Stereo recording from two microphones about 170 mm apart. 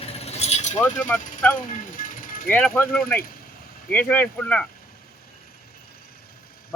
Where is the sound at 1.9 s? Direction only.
55° left (ahead or behind).